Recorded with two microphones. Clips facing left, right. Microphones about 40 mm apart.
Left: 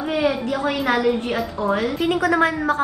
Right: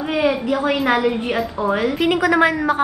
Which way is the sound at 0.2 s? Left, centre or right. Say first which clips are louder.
Right 4 dB; right.